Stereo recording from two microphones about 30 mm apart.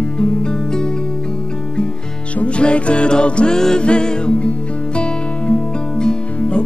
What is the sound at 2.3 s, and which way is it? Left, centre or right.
Music, left.